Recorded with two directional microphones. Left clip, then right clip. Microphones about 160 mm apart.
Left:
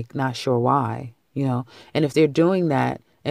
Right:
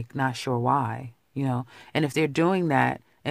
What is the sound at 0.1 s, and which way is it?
Speech, 10° left (ahead or behind).